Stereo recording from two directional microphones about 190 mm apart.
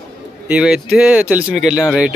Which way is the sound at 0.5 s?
5° right (ahead or behind).